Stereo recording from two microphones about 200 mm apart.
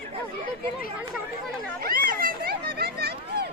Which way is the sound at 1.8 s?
45° right (ahead or behind).